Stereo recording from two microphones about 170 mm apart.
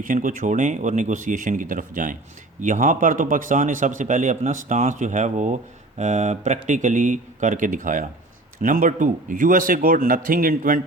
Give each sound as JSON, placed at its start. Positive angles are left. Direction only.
{"t": 0.0, "sound": "a man's voice", "side_deg": -50}